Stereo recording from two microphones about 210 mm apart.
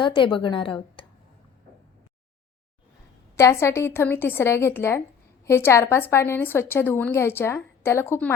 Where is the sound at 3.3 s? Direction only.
15° left (ahead or behind).